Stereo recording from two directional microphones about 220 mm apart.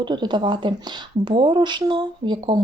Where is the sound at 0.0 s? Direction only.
20° right (ahead or behind).